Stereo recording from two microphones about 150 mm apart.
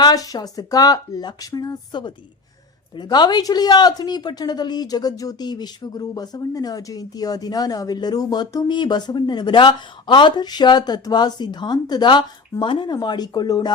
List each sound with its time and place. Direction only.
0.0 s speech: 25° left (ahead or behind)